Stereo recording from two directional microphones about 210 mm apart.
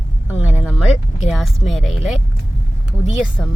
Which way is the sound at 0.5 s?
Centre (ahead or behind).